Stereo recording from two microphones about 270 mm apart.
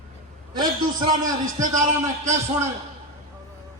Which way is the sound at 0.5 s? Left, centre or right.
Centre.